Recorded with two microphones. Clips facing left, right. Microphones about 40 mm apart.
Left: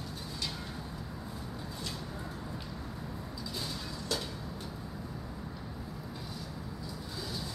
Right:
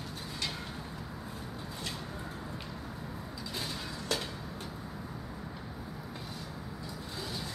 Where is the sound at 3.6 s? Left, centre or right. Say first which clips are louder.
Right 2 dB; centre.